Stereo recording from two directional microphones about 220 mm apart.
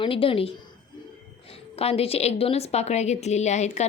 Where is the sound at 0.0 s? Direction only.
25° left (ahead or behind).